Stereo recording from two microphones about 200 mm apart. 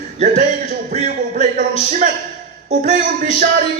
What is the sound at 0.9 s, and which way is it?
A man's voice, 40° right (ahead or behind).